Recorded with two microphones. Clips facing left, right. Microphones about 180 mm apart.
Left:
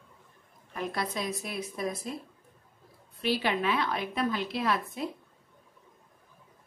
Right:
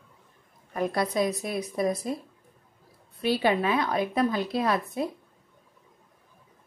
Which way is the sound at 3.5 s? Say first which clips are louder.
Right 4 dB; 40° right (ahead or behind).